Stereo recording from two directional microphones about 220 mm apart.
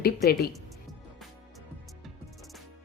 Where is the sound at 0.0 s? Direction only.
45° left (ahead or behind).